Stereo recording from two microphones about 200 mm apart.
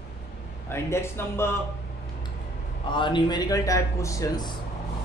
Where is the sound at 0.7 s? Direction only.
15° left (ahead or behind).